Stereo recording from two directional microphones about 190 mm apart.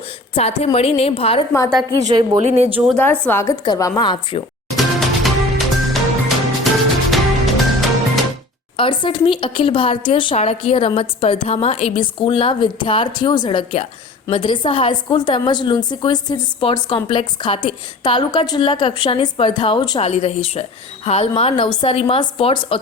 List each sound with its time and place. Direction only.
0.3 s a woman's voice: 30° left (ahead or behind)
2.4 s speech: 35° right (ahead or behind)
2.9 s a woman's voice: 10° left (ahead or behind); by 4.4 s 25° left (ahead or behind)
4.8 s music: centre (ahead or behind)
8.7 s a woman's voice: 25° left (ahead or behind)